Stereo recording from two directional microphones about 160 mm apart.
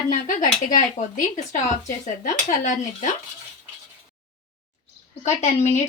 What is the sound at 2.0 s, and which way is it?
Speech, 50° left (ahead or behind).